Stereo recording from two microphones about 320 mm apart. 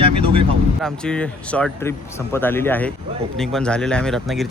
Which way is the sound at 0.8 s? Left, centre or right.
Centre.